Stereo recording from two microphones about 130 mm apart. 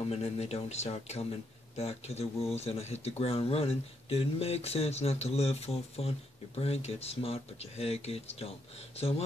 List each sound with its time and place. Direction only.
0.1 s speech: 50° left (ahead or behind)